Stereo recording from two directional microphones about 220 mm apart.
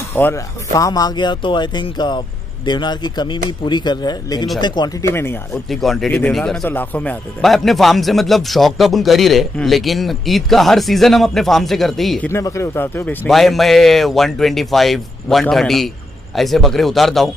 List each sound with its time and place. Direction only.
0.1 s speech: 10° left (ahead or behind)
5.7 s a man's voice: centre (ahead or behind)
12.3 s a man's voice: 10° left (ahead or behind)